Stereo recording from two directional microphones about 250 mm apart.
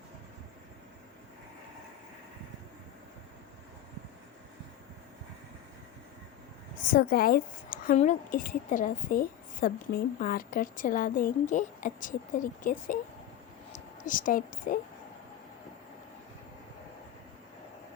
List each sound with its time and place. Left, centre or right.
6.9 s a woman's voice: left